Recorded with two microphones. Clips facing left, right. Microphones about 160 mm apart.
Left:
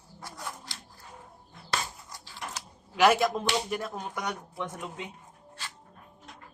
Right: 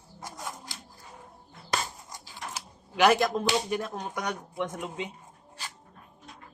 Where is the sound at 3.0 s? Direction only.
Centre (ahead or behind).